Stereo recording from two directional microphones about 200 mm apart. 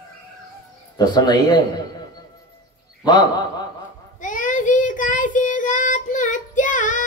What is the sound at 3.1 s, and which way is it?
Speech, 20° left (ahead or behind).